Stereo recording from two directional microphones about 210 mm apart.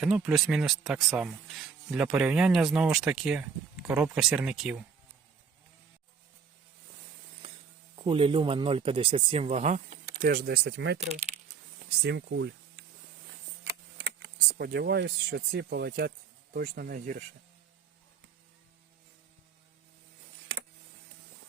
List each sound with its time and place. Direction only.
0.0 s speech: centre (ahead or behind)
7.9 s speech: 25° right (ahead or behind); by 11.0 s 55° right (ahead or behind)
11.0 s speech: 30° right (ahead or behind)
12.0 s speech: 55° right (ahead or behind)